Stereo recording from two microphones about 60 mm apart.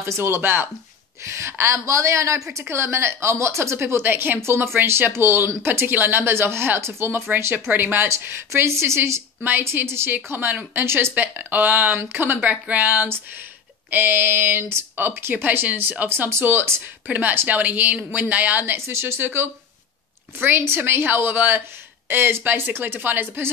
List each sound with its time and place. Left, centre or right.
0.0 s a woman's voice: right
1.2 s a woman's voice: right
2.7 s a woman's voice: right
4.4 s a woman's voice: right
9.4 s speech: right
11.3 s a woman's voice: right
18.8 s speech: right